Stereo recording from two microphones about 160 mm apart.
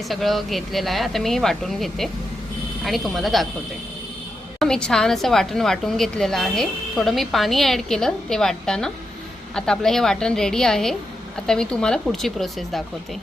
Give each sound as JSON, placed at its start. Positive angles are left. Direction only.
{"t": 0.1, "sound": "a woman's voice", "side_deg": 0}
{"t": 4.6, "sound": "a woman's voice", "side_deg": 5}